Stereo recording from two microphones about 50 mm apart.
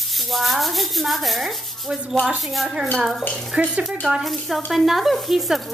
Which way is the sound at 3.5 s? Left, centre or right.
Right.